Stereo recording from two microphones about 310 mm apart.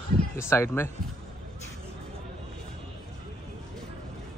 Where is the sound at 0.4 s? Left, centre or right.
Centre.